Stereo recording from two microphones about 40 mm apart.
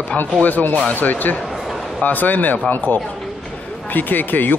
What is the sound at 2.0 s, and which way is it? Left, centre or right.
Speech, left.